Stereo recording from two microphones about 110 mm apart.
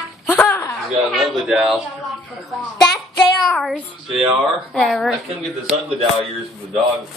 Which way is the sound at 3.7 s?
5° right (ahead or behind).